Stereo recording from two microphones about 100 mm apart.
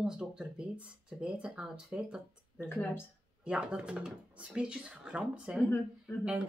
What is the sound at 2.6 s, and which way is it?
Speech, 20° left (ahead or behind).